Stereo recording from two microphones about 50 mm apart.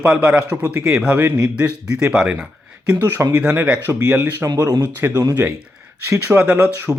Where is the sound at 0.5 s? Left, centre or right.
Right.